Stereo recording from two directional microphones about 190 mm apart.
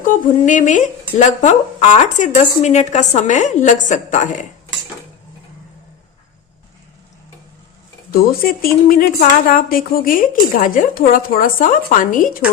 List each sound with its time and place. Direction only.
0.0 s speech: 45° left (ahead or behind)
8.1 s a woman's voice: 50° left (ahead or behind)